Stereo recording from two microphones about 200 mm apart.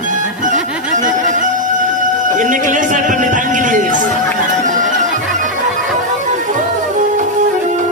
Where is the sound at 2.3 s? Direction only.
40° right (ahead or behind).